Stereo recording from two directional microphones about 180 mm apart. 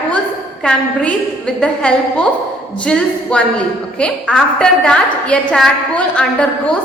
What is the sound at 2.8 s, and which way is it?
A woman's voice, 5° left (ahead or behind).